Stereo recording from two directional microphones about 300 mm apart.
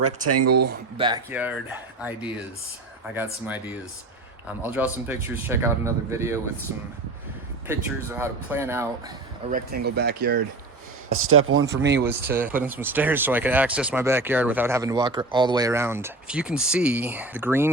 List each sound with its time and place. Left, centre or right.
0.0 s speech: right
0.9 s speech: centre
3.4 s speech: centre
7.7 s speech: centre
9.5 s speech: right
11.1 s speech: right
12.0 s speech: centre